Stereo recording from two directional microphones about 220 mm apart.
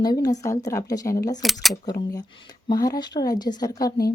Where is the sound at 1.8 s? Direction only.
15° left (ahead or behind).